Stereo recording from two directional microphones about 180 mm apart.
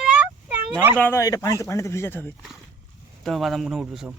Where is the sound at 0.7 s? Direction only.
10° right (ahead or behind).